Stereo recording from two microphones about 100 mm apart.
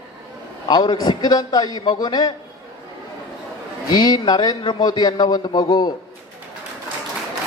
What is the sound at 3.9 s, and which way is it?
A man's voice, 45° left (ahead or behind).